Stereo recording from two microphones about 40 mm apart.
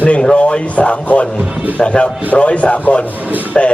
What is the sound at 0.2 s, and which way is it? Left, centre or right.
A man's voice, left.